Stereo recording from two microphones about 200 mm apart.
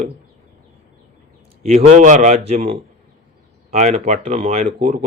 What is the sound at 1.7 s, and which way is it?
A man's voice, 35° right (ahead or behind).